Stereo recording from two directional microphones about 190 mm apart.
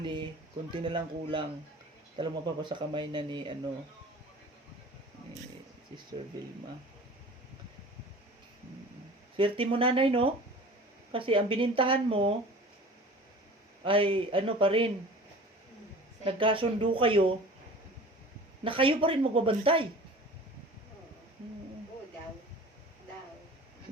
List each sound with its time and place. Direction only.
0.0 s speech: 25° right (ahead or behind)
9.4 s speech: 30° right (ahead or behind)
13.8 s speech: 30° right (ahead or behind)
16.2 s speech: 25° right (ahead or behind)
18.6 s speech: 25° right (ahead or behind)